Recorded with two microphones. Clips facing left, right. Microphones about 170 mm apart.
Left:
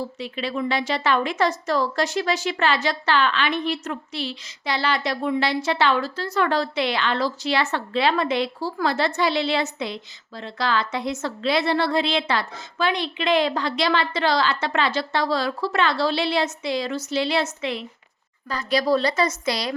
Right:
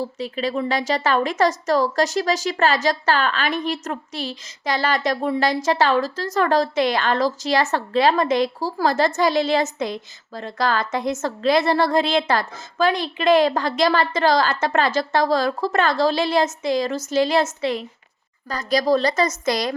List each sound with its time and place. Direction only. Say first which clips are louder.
0.0 s a woman's voice: right 4 dB; 40° right (ahead or behind)